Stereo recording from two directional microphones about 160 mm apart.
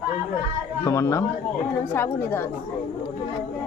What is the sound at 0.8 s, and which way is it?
Speech, 20° left (ahead or behind).